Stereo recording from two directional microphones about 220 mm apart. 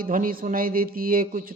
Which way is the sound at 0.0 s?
40° right (ahead or behind).